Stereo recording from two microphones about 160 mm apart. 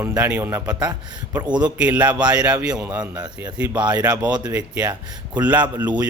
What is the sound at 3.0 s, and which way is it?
Speech, 25° right (ahead or behind).